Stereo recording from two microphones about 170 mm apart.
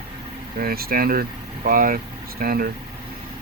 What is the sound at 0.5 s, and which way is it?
Speech, 65° right (ahead or behind).